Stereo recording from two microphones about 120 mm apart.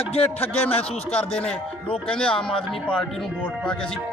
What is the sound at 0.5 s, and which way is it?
Speech, 55° left (ahead or behind).